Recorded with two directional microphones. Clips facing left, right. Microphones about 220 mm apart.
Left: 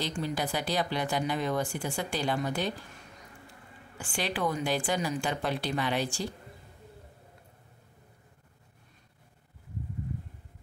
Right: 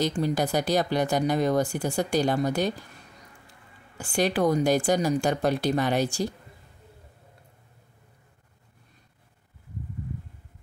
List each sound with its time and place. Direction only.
0.0 s speech: 40° right (ahead or behind)
4.0 s speech: 40° right (ahead or behind)